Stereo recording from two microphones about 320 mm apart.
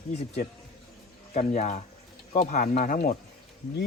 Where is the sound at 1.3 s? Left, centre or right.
Left.